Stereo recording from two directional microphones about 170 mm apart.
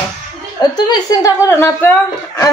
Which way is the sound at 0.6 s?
25° left (ahead or behind).